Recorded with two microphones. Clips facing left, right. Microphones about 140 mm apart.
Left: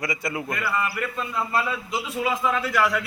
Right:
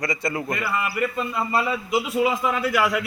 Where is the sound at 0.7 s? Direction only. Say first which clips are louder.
Right 3 dB; 10° right (ahead or behind).